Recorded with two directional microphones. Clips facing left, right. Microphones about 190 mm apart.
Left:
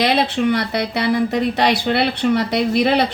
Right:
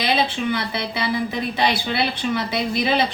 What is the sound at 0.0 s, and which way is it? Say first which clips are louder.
A woman's voice: left 5 dB; 70° left (ahead or behind).